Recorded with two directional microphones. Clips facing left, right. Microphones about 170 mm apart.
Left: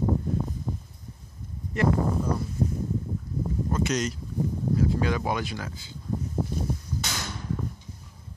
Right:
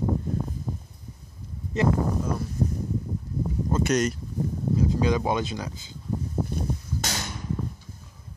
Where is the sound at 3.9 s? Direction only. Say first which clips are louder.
Right 4 dB; 55° right (ahead or behind).